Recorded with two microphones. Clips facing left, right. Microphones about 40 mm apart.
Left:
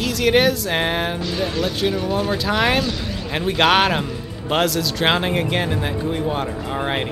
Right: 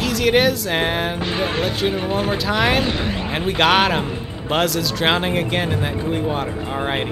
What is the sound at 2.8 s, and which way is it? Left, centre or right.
Speech, right.